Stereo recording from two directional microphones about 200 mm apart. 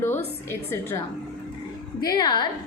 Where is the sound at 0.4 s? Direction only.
10° left (ahead or behind).